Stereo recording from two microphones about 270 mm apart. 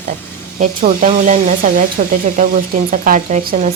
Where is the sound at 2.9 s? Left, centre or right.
Right.